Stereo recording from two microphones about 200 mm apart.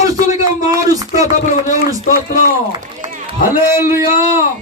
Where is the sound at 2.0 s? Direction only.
40° left (ahead or behind).